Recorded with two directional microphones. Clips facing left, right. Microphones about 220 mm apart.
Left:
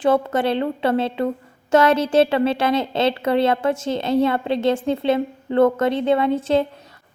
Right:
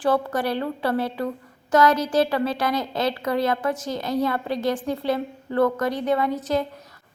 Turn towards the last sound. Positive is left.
turn(degrees=25)  # may be behind; listen again after turning